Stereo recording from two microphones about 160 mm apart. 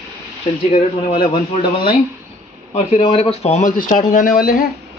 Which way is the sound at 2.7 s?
40° left (ahead or behind).